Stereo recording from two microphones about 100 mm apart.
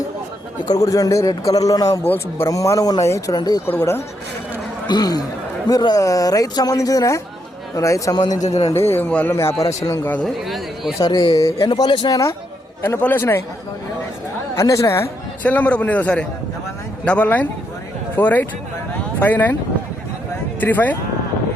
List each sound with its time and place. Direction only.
0.7 s speech: 35° left (ahead or behind)
4.9 s speech: 40° left (ahead or behind)
8.4 s a man's voice: 90° left
8.9 s a man's voice: 15° left (ahead or behind)
9.3 s a man's voice: 30° left (ahead or behind)
10.2 s speech: centre (ahead or behind)
10.9 s speech: 40° left (ahead or behind)
11.5 s speech: 60° left (ahead or behind)
11.8 s speech: 50° left (ahead or behind)
12.8 s a man's voice: 20° left (ahead or behind)
14.5 s speech: 30° left (ahead or behind)
15.4 s a man's voice: 15° left (ahead or behind)
20.6 s a man's voice: 20° left (ahead or behind)